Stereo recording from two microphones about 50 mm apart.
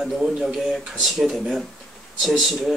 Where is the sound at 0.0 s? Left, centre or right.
Centre.